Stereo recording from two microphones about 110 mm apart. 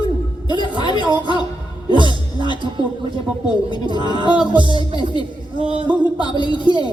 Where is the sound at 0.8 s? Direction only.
40° left (ahead or behind).